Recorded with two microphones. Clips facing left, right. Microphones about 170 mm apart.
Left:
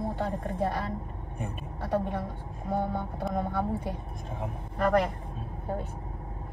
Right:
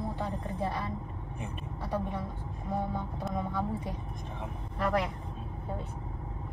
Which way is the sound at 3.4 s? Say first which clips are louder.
Left 3 dB; 65° left (ahead or behind).